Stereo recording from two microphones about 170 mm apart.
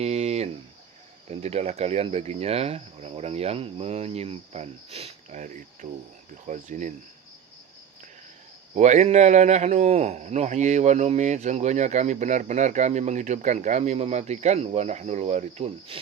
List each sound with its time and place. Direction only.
0.0 s a sound: 40° right (ahead or behind)
1.3 s a man's voice: 40° right (ahead or behind)
8.7 s a man's voice: 45° right (ahead or behind)